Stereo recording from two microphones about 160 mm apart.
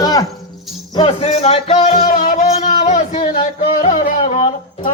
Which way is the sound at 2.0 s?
55° left (ahead or behind).